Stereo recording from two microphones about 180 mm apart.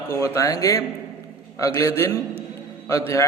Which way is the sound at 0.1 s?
15° left (ahead or behind).